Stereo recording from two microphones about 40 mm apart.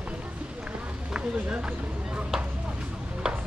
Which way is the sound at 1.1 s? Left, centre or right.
Right.